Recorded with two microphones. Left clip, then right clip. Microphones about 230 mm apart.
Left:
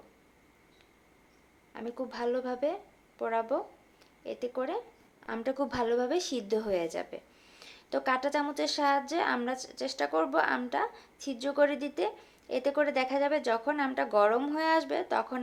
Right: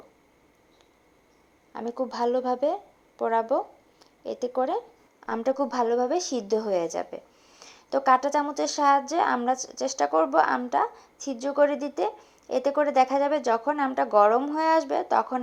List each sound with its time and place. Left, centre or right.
1.7 s a woman's voice: centre